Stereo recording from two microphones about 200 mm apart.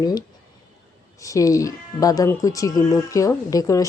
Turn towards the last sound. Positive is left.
turn(degrees=15)  # may be behind; listen again after turning